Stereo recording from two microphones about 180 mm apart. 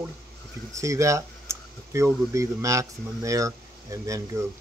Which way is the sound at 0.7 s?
15° right (ahead or behind).